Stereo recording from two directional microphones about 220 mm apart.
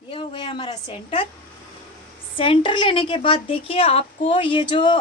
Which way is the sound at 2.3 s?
25° left (ahead or behind).